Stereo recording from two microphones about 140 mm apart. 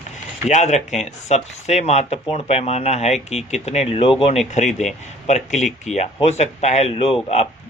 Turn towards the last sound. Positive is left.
turn(degrees=45)  # may be behind; listen again after turning